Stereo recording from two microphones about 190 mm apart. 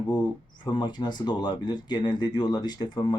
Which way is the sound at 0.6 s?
20° left (ahead or behind).